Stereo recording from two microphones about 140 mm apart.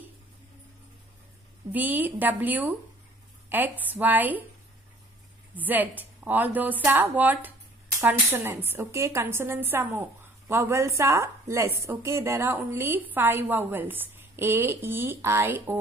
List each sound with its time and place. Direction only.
1.7 s a woman's voice: 10° right (ahead or behind)
5.6 s a woman's voice: 10° right (ahead or behind)